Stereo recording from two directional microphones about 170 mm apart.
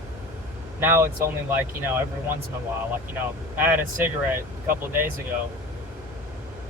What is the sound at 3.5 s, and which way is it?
Speech, 10° right (ahead or behind).